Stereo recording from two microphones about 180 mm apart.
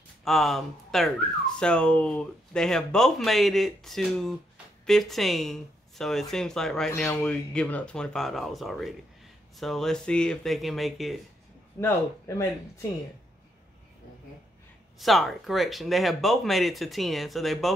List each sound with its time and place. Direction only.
0.2 s speech: centre (ahead or behind)
11.8 s a man's voice: 15° left (ahead or behind)
15.0 s speech: centre (ahead or behind)